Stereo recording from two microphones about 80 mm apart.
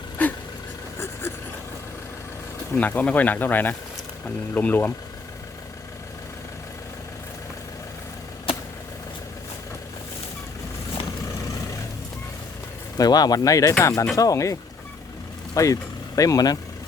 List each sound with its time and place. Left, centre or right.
0.2 s vehicle: centre
0.9 s a sound: left
2.7 s speech: centre
13.0 s speech: left